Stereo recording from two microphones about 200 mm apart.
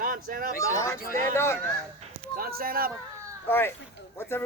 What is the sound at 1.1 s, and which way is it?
Speech, 15° left (ahead or behind).